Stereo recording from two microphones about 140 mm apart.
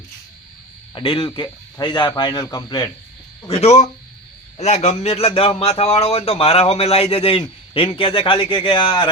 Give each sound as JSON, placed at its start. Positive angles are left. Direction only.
{"t": 0.9, "sound": "a man's voice", "side_deg": 40}
{"t": 3.5, "sound": "a man's voice", "side_deg": 50}